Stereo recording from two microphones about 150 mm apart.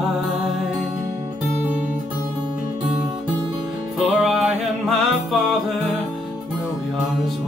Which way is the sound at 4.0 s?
5° right (ahead or behind).